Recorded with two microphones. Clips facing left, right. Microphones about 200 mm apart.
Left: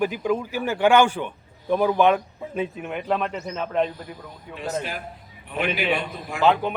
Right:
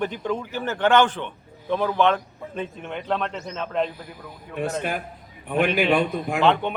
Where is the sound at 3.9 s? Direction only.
10° right (ahead or behind).